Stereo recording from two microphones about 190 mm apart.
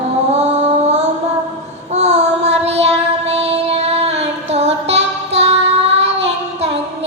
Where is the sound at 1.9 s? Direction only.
35° right (ahead or behind).